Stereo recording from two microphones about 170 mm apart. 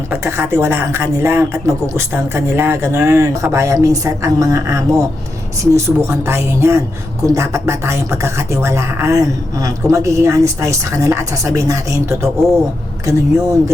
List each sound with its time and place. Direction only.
0.1 s speech: 15° right (ahead or behind)